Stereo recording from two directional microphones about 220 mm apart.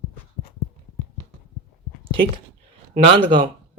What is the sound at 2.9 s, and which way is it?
Speech, 25° right (ahead or behind).